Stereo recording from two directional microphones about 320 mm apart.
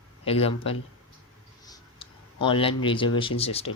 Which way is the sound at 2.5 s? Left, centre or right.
Centre.